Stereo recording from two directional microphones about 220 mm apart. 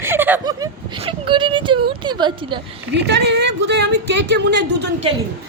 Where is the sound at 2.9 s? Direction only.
50° right (ahead or behind).